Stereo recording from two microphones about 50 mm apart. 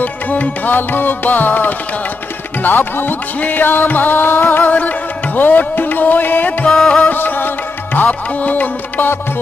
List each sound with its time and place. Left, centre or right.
0.0 s music: left
6.7 s music: centre
7.1 s music: left